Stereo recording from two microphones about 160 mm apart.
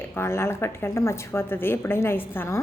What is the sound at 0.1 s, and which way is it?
A woman's voice, 15° left (ahead or behind).